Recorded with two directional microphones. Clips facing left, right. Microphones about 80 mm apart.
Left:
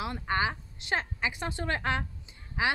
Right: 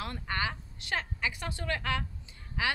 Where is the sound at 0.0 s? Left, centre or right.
Centre.